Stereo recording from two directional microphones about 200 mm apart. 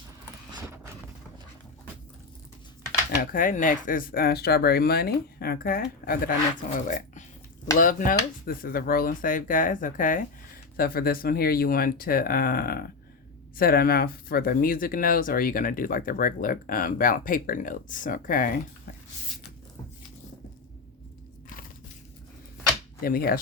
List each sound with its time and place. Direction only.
3.2 s speech: 45° left (ahead or behind)
23.0 s speech: 50° left (ahead or behind)